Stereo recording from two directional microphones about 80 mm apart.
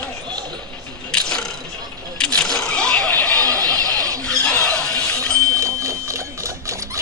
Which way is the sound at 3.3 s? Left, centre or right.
Right.